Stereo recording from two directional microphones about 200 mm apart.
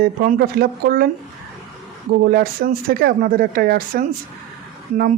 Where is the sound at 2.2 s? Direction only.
45° right (ahead or behind).